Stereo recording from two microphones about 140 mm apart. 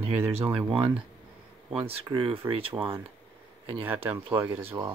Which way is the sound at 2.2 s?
40° right (ahead or behind).